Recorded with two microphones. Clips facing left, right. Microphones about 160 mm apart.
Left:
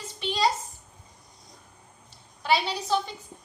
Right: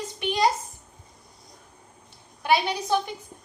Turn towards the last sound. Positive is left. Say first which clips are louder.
# right 2 dB
turn(degrees=-15)  # may be behind; listen again after turning